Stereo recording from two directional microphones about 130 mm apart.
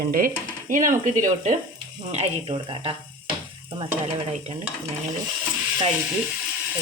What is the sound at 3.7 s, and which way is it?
Sizzle, 40° right (ahead or behind).